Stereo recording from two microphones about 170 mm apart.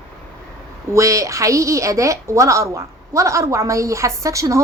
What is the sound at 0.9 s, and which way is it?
A woman's voice, 20° right (ahead or behind).